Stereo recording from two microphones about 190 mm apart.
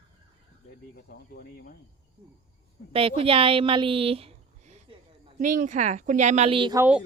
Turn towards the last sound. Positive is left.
turn(degrees=-5)  # may be behind; listen again after turning